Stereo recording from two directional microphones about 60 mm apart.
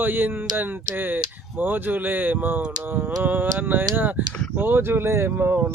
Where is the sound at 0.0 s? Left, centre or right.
Right.